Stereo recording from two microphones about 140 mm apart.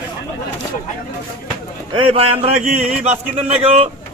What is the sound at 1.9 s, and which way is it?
Speech, 40° right (ahead or behind).